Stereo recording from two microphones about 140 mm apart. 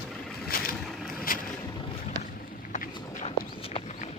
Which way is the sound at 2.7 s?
60° left (ahead or behind).